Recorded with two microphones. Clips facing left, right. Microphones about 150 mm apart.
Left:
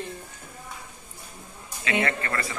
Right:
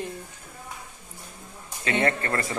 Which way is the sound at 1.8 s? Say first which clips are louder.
Right 2 dB; 40° right (ahead or behind).